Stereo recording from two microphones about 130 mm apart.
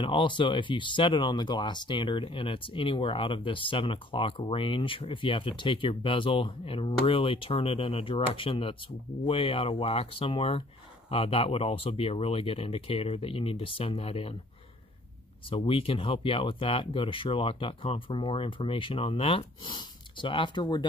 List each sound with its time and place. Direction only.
0.0 s speech: 40° left (ahead or behind)
15.5 s speech: 40° left (ahead or behind)